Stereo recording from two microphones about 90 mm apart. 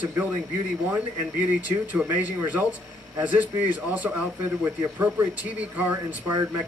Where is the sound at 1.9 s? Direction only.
20° right (ahead or behind).